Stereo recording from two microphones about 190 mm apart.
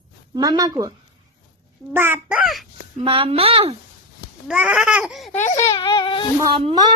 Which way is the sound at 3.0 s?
30° right (ahead or behind).